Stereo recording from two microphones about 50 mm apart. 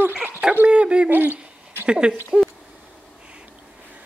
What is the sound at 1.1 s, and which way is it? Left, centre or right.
Owl, right.